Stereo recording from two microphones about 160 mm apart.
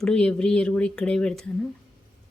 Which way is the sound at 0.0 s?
5° left (ahead or behind).